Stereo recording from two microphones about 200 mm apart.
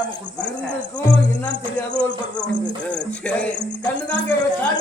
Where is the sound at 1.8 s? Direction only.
5° left (ahead or behind).